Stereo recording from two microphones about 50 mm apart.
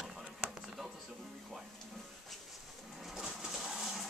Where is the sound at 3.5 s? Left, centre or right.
Centre.